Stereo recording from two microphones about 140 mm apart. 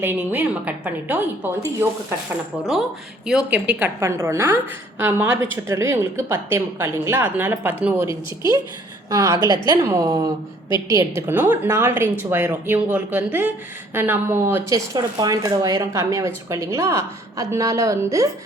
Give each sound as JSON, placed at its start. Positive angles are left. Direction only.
{"t": 0.0, "sound": "a woman's voice", "side_deg": -15}
{"t": 3.2, "sound": "a woman's voice", "side_deg": -5}
{"t": 9.0, "sound": "a woman's voice", "side_deg": -20}
{"t": 14.9, "sound": "speech", "side_deg": -25}